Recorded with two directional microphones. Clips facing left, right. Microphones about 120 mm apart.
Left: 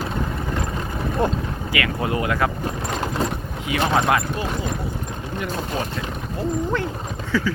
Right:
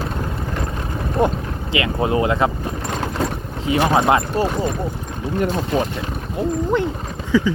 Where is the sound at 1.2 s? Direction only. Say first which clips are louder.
Right 4 dB; 15° right (ahead or behind).